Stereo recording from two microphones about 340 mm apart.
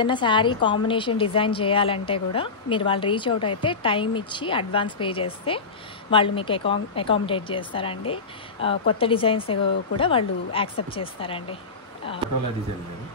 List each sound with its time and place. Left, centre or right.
0.0 s a woman's voice: centre